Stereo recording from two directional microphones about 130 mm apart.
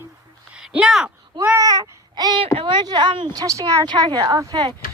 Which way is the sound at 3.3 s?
25° right (ahead or behind).